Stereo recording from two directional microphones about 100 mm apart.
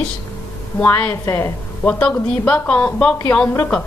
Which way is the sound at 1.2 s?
30° left (ahead or behind).